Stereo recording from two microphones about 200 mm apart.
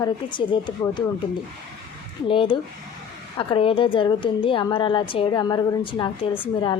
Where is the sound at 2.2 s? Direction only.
25° left (ahead or behind).